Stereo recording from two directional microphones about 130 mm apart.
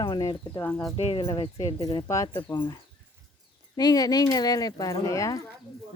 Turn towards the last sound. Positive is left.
turn(degrees=25)  # may be behind; listen again after turning